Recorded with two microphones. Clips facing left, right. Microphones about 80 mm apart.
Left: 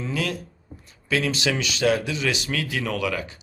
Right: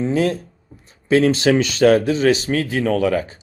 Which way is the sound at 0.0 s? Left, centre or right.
Right.